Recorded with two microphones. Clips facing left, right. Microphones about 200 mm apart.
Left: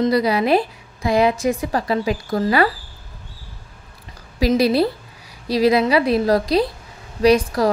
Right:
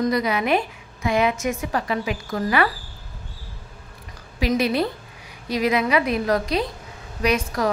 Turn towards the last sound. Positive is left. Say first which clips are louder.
# left 7 dB
turn(degrees=35)  # may be behind; listen again after turning